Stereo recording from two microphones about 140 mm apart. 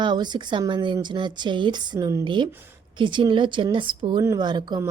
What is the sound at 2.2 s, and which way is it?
Speech, 35° right (ahead or behind).